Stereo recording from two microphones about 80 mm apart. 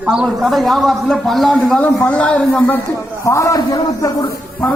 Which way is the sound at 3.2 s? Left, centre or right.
Left.